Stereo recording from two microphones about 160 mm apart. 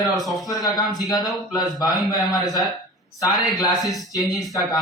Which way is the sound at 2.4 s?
25° left (ahead or behind).